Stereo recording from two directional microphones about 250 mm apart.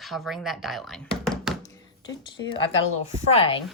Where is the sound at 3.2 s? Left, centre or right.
Left.